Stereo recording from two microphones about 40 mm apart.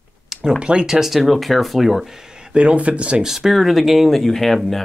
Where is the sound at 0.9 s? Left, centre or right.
Centre.